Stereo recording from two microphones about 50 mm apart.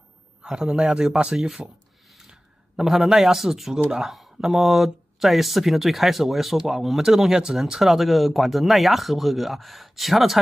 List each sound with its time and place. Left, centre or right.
0.4 s a man's voice: centre